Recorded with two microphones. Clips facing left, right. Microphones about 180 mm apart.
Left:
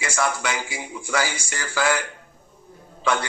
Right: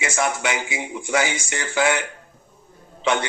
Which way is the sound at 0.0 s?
20° right (ahead or behind).